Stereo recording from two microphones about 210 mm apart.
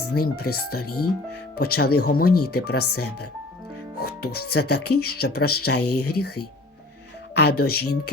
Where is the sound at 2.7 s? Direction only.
90° left.